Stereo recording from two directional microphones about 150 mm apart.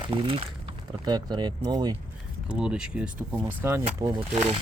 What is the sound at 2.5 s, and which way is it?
Speech, 5° right (ahead or behind).